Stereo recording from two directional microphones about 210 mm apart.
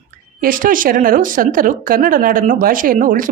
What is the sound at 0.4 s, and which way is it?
A woman's voice, 40° right (ahead or behind).